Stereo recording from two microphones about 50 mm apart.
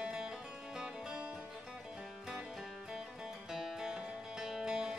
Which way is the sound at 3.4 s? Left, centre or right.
Centre.